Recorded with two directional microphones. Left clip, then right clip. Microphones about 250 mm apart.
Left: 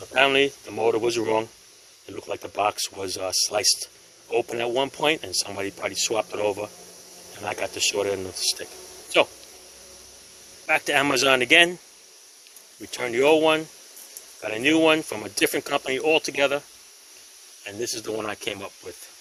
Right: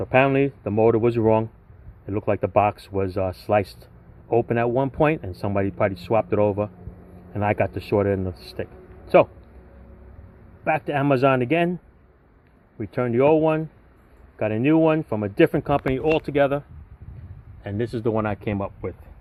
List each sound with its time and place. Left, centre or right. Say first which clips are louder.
0.1 s speech: even; centre
10.7 s speech: even; left
12.9 s speech: right 1 dB; centre
17.6 s speech: right 4 dB; centre